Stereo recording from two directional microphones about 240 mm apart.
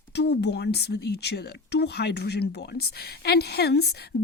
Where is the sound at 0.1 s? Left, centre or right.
Left.